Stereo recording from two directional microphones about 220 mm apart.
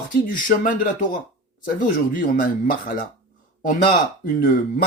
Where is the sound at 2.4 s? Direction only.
40° left (ahead or behind).